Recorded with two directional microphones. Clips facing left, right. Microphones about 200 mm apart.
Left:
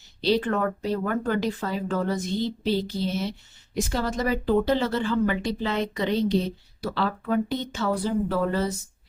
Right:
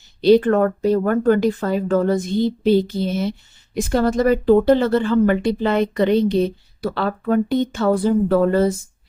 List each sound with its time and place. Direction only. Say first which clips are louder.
0.2 s speech: right 10 dB; 50° right (ahead or behind)